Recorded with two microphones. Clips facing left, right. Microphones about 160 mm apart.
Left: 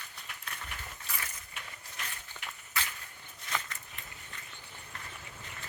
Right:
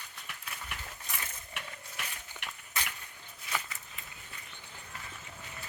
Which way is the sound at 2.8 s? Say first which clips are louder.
Left 1 dB; 20° right (ahead or behind).